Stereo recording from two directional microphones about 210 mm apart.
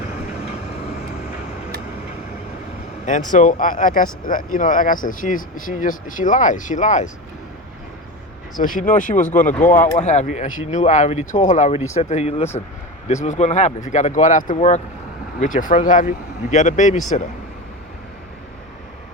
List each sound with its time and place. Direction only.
3.3 s speech: 40° left (ahead or behind)
8.6 s speech: 40° left (ahead or behind)